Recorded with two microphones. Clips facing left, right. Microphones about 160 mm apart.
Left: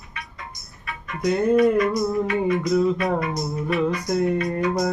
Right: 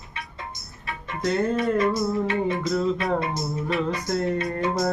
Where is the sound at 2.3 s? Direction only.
25° right (ahead or behind).